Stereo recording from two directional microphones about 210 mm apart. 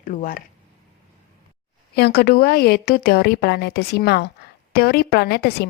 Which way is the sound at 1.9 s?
50° left (ahead or behind).